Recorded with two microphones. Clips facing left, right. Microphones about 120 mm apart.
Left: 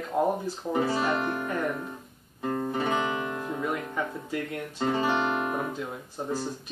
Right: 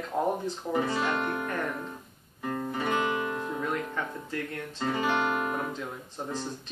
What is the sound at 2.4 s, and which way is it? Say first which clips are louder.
Music: left 3 dB; 20° left (ahead or behind).